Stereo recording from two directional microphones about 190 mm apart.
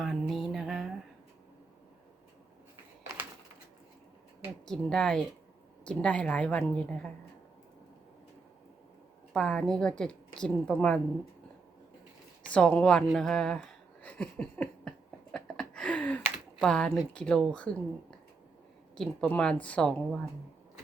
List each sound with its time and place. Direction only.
0.0 s music: centre (ahead or behind)
4.6 s a woman's voice: 5° left (ahead or behind)
9.3 s a woman's voice: 5° left (ahead or behind)
12.5 s a sound: 5° left (ahead or behind)
16.6 s a woman's voice: 5° left (ahead or behind)
18.9 s a woman's voice: 5° left (ahead or behind)